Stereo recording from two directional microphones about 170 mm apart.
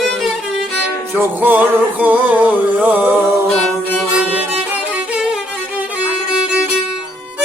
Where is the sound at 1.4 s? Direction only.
10° right (ahead or behind).